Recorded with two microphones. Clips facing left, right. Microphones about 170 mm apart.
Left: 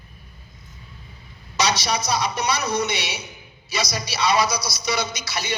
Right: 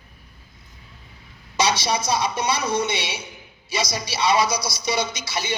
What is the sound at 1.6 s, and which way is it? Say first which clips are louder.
Speech: right 1 dB; 25° right (ahead or behind).